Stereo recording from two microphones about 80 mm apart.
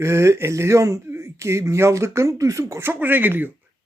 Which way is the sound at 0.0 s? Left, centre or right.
Right.